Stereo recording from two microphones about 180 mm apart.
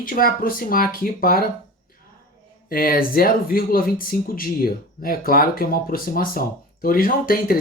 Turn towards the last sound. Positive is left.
turn(degrees=55)  # may be behind; listen again after turning